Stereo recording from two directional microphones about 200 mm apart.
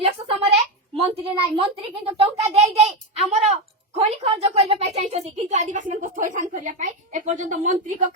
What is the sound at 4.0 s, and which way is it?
A woman's voice, 30° right (ahead or behind).